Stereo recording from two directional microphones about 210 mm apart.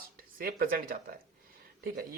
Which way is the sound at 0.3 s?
45° right (ahead or behind).